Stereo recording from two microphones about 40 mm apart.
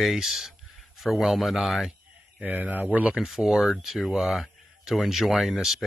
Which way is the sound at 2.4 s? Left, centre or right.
Right.